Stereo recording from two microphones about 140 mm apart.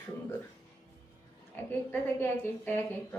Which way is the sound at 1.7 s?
15° left (ahead or behind).